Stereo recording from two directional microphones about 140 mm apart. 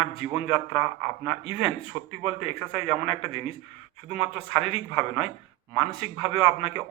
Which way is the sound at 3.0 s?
40° left (ahead or behind).